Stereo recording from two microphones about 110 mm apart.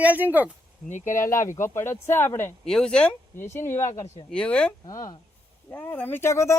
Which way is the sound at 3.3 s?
20° left (ahead or behind).